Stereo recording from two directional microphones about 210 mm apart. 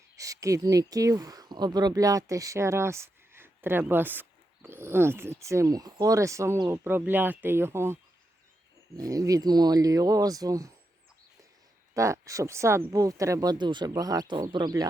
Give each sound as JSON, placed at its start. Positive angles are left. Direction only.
{"t": 0.2, "sound": "speech", "side_deg": -15}
{"t": 9.0, "sound": "speech", "side_deg": -15}
{"t": 11.9, "sound": "speech", "side_deg": -15}